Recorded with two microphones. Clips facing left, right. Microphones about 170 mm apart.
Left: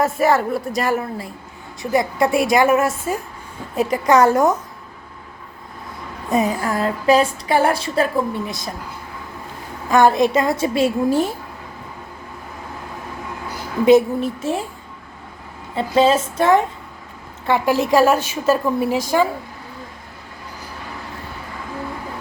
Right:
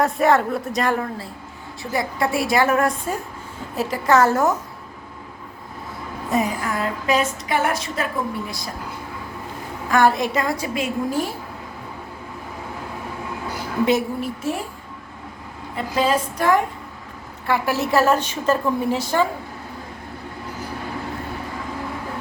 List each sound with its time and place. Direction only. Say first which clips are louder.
0.0 s a woman's voice: left 1 dB; centre (ahead or behind)
1.8 s a woman's voice: left 5 dB; 20° left (ahead or behind)
6.6 s a woman's voice: left 4 dB; 35° left (ahead or behind)
9.9 s a woman's voice: left 4 dB; 20° left (ahead or behind)
13.8 s a woman's voice: left 8 dB; 20° left (ahead or behind)
15.7 s a woman's voice: left 5 dB; 25° left (ahead or behind); by 19.3 s 10° left (ahead or behind)